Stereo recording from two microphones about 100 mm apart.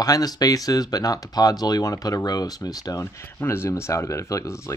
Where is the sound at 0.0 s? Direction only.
40° left (ahead or behind).